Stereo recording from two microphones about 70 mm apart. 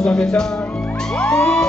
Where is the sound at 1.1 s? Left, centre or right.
Centre.